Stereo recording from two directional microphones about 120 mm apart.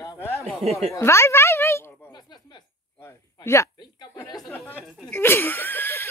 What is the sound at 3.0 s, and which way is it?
Speech, 20° left (ahead or behind).